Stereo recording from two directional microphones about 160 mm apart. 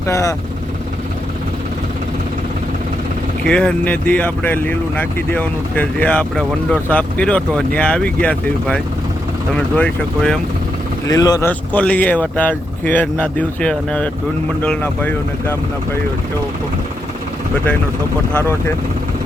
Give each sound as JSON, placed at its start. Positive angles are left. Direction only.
{"t": 0.1, "sound": "speech", "side_deg": 20}
{"t": 3.4, "sound": "speech", "side_deg": 5}
{"t": 11.0, "sound": "speech", "side_deg": 20}
{"t": 11.4, "sound": "speech", "side_deg": 10}